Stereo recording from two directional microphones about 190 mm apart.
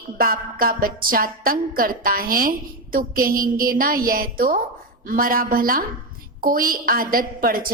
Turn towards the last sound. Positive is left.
turn(degrees=-50)  # may be behind; listen again after turning